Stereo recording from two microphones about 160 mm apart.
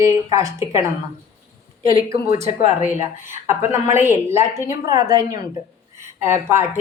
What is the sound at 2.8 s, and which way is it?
Speech, 50° left (ahead or behind).